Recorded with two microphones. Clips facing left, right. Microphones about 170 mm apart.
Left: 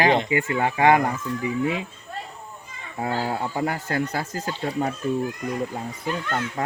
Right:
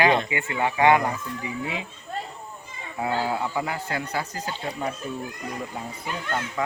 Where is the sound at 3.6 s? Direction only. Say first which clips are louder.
Left 4 dB; 45° left (ahead or behind).